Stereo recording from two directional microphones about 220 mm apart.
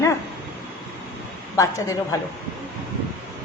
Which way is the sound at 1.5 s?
15° left (ahead or behind).